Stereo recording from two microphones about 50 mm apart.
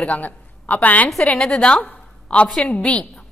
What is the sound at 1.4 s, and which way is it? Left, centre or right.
A woman's voice, centre.